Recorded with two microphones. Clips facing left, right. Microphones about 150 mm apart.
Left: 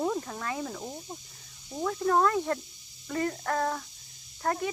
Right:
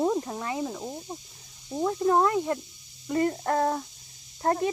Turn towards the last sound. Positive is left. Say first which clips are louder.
# right 4 dB
turn(degrees=-30)  # may be behind; listen again after turning